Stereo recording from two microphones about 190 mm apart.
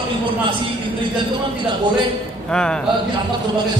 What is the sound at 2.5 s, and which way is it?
Speech, 5° left (ahead or behind).